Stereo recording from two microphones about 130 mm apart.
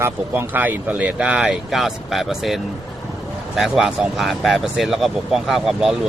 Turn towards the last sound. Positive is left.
turn(degrees=-5)  # may be behind; listen again after turning